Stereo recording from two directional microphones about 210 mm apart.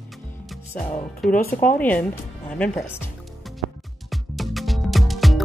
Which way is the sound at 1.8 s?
10° left (ahead or behind).